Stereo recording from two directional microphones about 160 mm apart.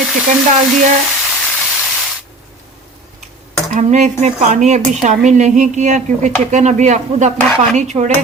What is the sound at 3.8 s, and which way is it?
A woman's voice, 50° right (ahead or behind).